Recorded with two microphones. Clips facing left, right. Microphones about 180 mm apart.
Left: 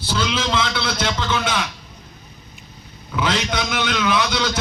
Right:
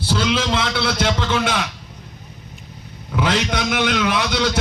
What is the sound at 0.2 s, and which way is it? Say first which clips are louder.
A man's voice: even; 60° right (ahead or behind).